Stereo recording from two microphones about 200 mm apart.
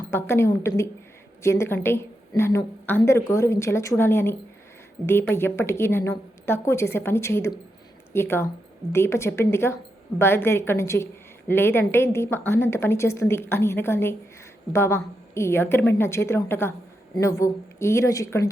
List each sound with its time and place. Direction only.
0.1 s a woman's voice: 10° left (ahead or behind)